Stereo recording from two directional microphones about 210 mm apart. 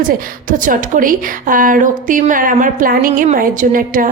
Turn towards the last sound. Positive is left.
turn(degrees=-40)  # may be behind; listen again after turning